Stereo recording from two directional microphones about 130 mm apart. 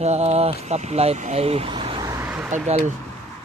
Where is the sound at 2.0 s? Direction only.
25° right (ahead or behind).